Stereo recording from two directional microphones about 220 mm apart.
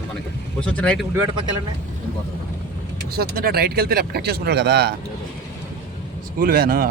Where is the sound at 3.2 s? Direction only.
45° right (ahead or behind).